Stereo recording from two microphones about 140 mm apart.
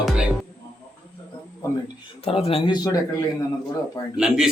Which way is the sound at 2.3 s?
45° left (ahead or behind).